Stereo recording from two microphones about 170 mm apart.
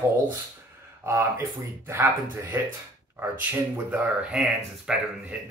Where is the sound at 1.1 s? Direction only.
15° right (ahead or behind).